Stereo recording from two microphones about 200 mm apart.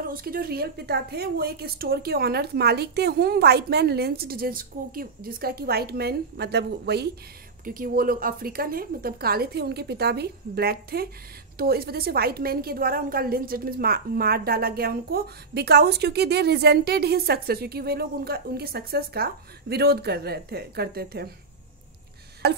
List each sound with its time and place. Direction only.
0.0 s a woman's voice: 50° right (ahead or behind)
7.6 s a woman's voice: 45° right (ahead or behind)
22.4 s a sound: 55° right (ahead or behind)